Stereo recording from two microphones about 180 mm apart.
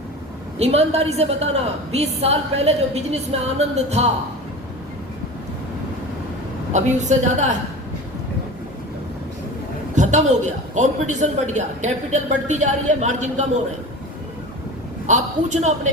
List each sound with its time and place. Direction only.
0.6 s a man's voice: 35° right (ahead or behind)
6.7 s a man's voice: 40° right (ahead or behind)
9.9 s a man's voice: 40° right (ahead or behind)
15.0 s a man's voice: 40° right (ahead or behind)